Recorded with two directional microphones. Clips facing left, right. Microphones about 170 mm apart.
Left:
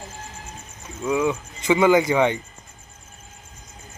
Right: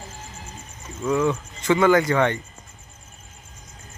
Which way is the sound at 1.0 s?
10° left (ahead or behind).